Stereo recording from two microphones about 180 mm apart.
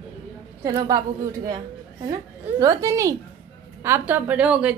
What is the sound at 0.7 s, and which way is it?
Speech, 20° right (ahead or behind).